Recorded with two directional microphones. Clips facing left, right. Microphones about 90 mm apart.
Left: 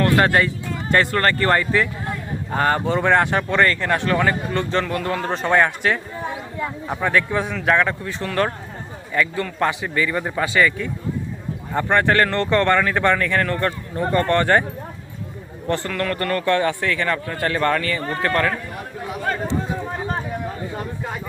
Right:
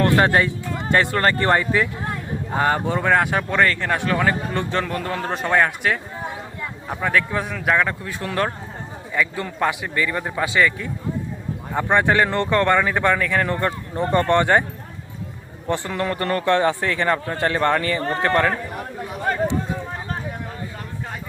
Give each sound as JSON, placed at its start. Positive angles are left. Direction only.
{"t": 0.0, "sound": "a man's voice", "side_deg": -10}
{"t": 15.6, "sound": "a man's voice", "side_deg": -15}